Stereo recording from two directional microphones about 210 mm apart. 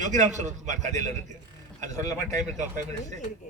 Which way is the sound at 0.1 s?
35° right (ahead or behind).